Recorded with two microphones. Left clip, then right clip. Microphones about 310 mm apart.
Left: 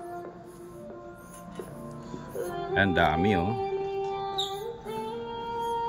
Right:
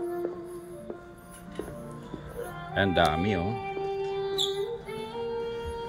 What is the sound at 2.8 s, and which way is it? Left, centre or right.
Speech, centre.